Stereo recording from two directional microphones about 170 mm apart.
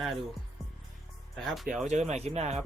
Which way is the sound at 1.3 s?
Centre (ahead or behind).